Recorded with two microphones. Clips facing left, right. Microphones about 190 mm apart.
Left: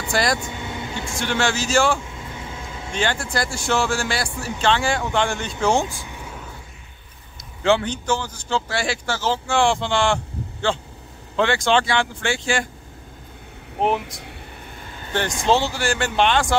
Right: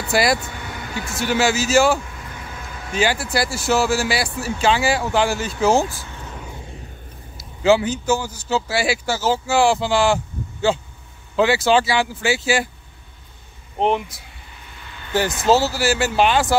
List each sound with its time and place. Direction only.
0.1 s speech: 10° right (ahead or behind)
0.4 s vehicle: 20° left (ahead or behind)
1.1 s speech: 5° right (ahead or behind)
2.0 s vehicle: 25° left (ahead or behind)
2.9 s speech: 5° right (ahead or behind)
5.9 s vehicle: 15° left (ahead or behind)
7.6 s speech: 5° right (ahead or behind)
13.7 s speech: centre (ahead or behind)
14.8 s vehicle: 40° left (ahead or behind)
15.4 s speech: 5° right (ahead or behind)